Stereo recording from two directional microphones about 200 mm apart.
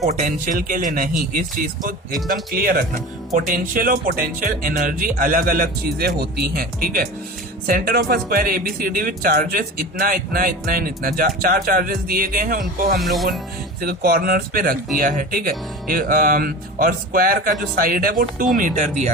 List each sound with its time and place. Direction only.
0.0 s speech: 40° right (ahead or behind)